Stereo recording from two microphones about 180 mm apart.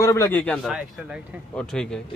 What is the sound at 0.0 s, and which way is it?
A man's voice, 15° left (ahead or behind).